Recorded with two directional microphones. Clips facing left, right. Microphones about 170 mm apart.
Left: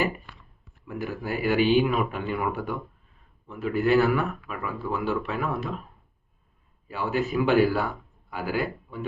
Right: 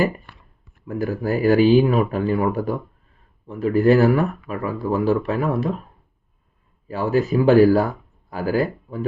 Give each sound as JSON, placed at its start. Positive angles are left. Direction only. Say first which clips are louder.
{"t": 0.9, "sound": "speech", "louder": "right 8 dB", "side_deg": -40}
{"t": 6.8, "sound": "speech", "louder": "right 7 dB", "side_deg": -40}